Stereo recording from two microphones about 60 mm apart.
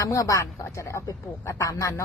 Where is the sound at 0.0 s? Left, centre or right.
Left.